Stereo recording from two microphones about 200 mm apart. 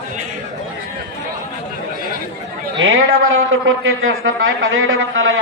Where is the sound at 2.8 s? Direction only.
85° right.